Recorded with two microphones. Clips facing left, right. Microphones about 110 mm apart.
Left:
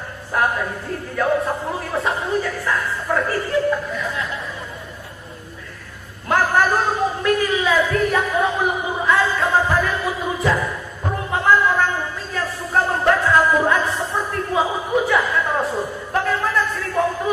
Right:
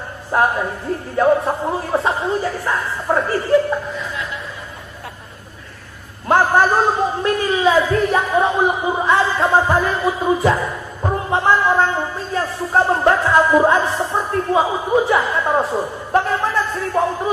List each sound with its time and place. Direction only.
0.3 s speech: 25° right (ahead or behind)
6.2 s a man's voice: 25° right (ahead or behind)
11.2 s a sound: 25° right (ahead or behind)